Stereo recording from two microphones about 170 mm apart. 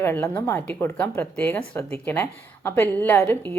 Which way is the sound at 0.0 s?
15° left (ahead or behind).